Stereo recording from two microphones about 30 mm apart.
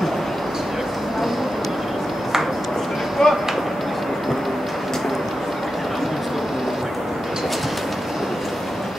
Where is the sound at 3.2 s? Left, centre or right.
Centre.